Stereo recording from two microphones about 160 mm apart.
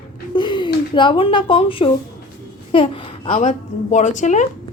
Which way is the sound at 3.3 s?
50° left (ahead or behind).